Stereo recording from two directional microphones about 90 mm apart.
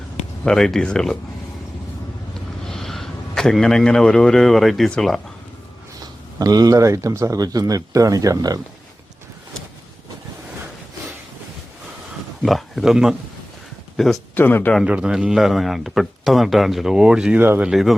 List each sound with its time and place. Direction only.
0.4 s a man's voice: 5° left (ahead or behind)
2.6 s a man's voice: 5° left (ahead or behind)
6.4 s speech: 45° right (ahead or behind)
12.4 s a sound: centre (ahead or behind)
13.9 s speech: centre (ahead or behind)
14.3 s speech: 20° left (ahead or behind)
14.8 s a man's voice: 10° right (ahead or behind)